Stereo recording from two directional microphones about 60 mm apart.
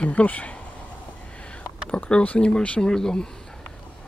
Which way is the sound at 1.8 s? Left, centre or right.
Left.